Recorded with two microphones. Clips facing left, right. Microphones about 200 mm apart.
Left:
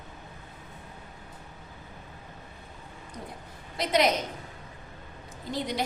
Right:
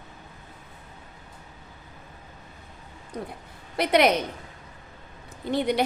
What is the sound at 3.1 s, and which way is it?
Speech, 60° right (ahead or behind).